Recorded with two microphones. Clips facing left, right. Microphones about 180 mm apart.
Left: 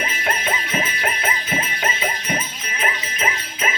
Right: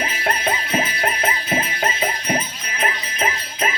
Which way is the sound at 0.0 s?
35° right (ahead or behind).